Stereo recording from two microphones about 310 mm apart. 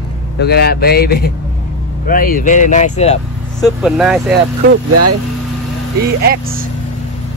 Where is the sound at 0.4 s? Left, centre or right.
Left.